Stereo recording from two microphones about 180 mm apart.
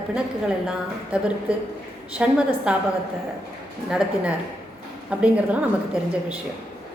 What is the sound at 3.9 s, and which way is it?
A woman's voice, 5° right (ahead or behind).